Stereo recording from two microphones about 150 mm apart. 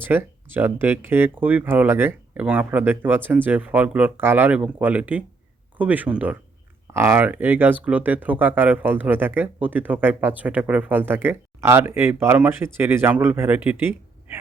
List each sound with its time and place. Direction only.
0.0 s speech: 15° right (ahead or behind)